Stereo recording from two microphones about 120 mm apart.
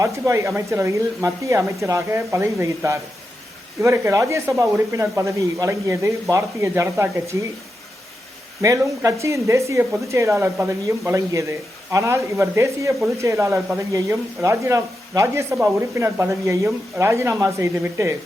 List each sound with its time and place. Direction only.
0.0 s speech: 25° right (ahead or behind)
8.8 s speech: 20° right (ahead or behind)